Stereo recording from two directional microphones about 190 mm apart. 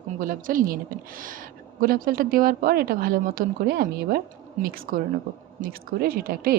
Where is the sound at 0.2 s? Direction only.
45° right (ahead or behind).